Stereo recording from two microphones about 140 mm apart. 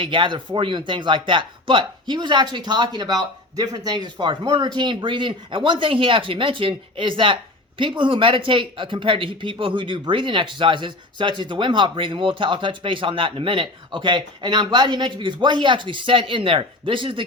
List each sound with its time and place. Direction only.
0.0 s speech: 35° right (ahead or behind)